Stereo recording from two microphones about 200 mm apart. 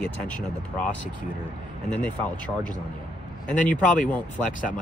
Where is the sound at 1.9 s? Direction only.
5° left (ahead or behind).